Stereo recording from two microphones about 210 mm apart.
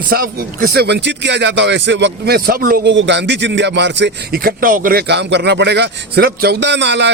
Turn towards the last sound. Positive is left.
turn(degrees=-55)  # may be behind; listen again after turning